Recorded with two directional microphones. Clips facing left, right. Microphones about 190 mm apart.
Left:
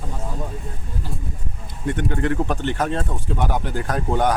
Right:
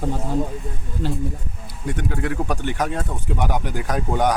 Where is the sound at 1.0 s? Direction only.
90° right.